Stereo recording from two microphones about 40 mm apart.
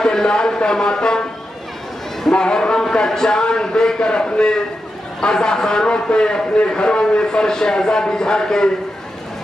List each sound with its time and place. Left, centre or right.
0.0 s speech: centre
2.3 s a man's voice: left